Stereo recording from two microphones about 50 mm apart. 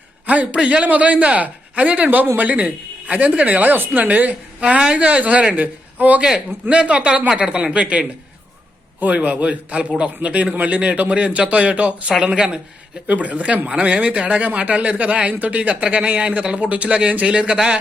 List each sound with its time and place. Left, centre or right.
0.3 s speech: right
6.2 s speech: right
13.1 s speech: right